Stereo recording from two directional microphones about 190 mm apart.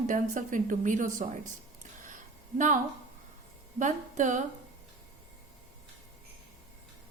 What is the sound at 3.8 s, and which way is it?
Speech, 40° right (ahead or behind).